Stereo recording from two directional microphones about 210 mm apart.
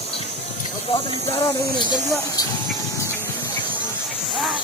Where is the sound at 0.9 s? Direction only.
25° left (ahead or behind).